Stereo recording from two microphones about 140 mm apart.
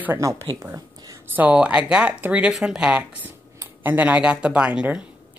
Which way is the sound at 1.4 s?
10° right (ahead or behind).